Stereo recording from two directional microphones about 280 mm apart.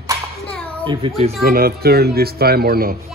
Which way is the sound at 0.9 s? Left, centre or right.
Centre.